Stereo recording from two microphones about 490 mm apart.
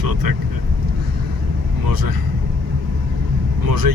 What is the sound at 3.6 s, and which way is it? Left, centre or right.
Speech, right.